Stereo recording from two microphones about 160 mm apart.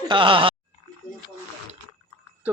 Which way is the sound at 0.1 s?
30° right (ahead or behind).